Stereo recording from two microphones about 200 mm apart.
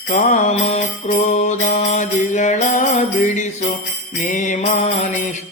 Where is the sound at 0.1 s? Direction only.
40° left (ahead or behind).